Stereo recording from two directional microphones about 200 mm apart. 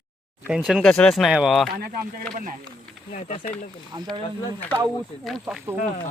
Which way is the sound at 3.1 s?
35° left (ahead or behind).